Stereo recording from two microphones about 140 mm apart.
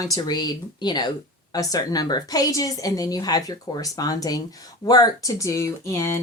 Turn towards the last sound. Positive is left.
turn(degrees=20)  # may be behind; listen again after turning